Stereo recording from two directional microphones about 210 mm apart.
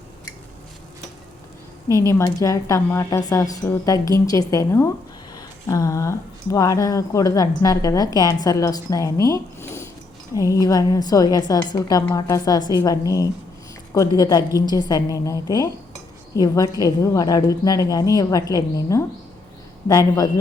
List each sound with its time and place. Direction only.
2.0 s speech: 15° left (ahead or behind)